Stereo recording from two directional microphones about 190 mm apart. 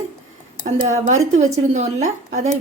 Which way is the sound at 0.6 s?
40° right (ahead or behind).